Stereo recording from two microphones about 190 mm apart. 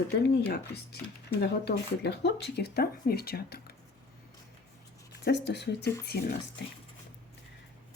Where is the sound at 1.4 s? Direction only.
60° left (ahead or behind).